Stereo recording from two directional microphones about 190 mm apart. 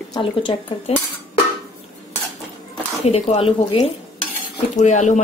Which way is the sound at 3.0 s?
30° left (ahead or behind).